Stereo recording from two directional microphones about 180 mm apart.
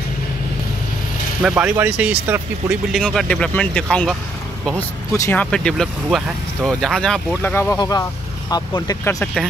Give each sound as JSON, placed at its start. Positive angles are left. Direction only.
{"t": 1.4, "sound": "speech", "side_deg": -5}
{"t": 2.9, "sound": "speech", "side_deg": 0}
{"t": 7.5, "sound": "speech", "side_deg": 15}
{"t": 9.2, "sound": "speech", "side_deg": 0}